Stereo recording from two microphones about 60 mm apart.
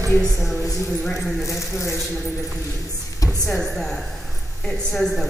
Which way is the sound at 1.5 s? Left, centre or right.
Left.